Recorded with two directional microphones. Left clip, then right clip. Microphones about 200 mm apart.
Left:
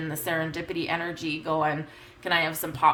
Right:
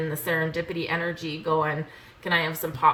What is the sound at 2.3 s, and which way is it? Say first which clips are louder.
Speech: even; 50° left (ahead or behind).